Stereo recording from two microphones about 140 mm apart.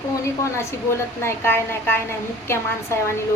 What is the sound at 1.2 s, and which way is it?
A woman's voice, 15° left (ahead or behind).